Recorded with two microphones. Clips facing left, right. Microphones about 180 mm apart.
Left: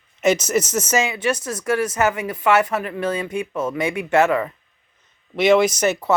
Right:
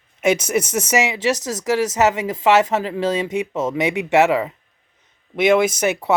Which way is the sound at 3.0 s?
90° right.